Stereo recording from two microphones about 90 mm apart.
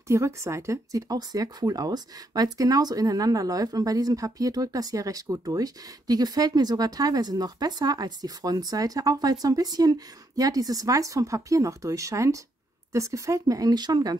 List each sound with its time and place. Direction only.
0.1 s speech: 35° right (ahead or behind); by 14.1 s 50° right (ahead or behind)